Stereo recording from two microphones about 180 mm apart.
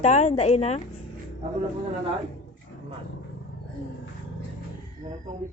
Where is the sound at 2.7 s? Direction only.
75° left (ahead or behind).